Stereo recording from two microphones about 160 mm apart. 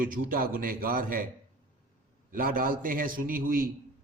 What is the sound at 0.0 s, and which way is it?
A man's voice, 60° right (ahead or behind).